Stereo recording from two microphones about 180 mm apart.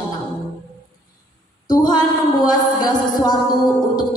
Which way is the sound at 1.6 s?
20° left (ahead or behind).